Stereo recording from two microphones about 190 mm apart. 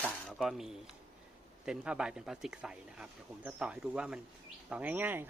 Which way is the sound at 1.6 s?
5° right (ahead or behind).